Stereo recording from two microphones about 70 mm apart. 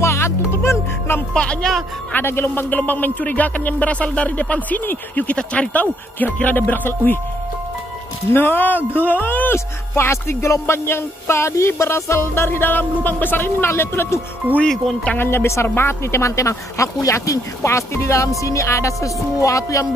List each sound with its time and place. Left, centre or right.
0.0 s music: left
1.3 s speech: centre
2.1 s speech: left
8.3 s speech: left
12.4 s speech: left